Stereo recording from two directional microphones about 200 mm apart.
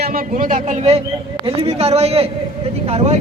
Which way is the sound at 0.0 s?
45° right (ahead or behind).